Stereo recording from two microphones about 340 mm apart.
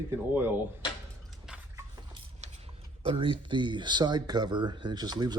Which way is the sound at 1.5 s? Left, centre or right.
Centre.